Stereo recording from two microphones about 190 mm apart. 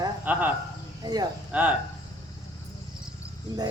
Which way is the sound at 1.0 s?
20° right (ahead or behind).